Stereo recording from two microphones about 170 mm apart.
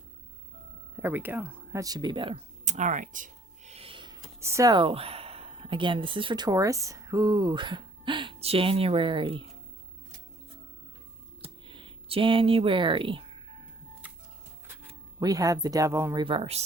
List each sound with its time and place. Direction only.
0.9 s speech: 10° right (ahead or behind); by 2.4 s 30° right (ahead or behind)
2.6 s speech: 45° right (ahead or behind)
3.7 s speech: 35° right (ahead or behind)
11.7 s speech: 30° right (ahead or behind)
15.2 s speech: 20° right (ahead or behind)
16.2 s speech: 30° right (ahead or behind)